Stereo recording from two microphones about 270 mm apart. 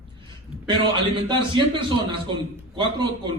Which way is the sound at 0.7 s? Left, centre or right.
Centre.